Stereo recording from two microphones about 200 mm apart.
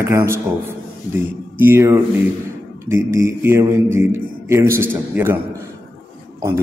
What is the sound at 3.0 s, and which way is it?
A man's voice, 15° right (ahead or behind).